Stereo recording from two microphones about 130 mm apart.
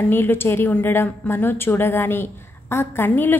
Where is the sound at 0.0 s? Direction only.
15° left (ahead or behind).